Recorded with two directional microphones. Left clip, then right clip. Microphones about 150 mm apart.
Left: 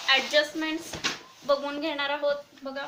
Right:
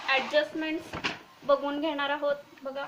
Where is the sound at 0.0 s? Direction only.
20° right (ahead or behind).